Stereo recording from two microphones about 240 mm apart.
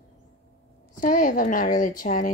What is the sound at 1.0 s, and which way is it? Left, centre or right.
A woman's voice, left.